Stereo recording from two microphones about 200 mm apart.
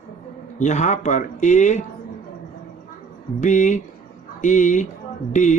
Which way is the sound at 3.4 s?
35° left (ahead or behind).